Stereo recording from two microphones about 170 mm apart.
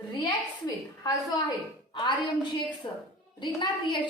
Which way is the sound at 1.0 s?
20° left (ahead or behind).